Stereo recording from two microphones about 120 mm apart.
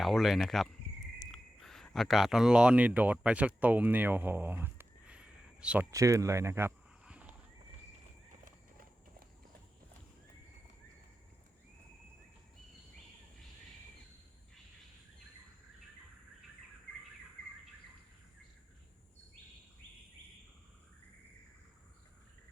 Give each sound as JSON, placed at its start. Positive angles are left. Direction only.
{"t": 0.0, "sound": "speech", "side_deg": 0}
{"t": 5.9, "sound": "speech", "side_deg": -25}
{"t": 7.0, "sound": "horse", "side_deg": -10}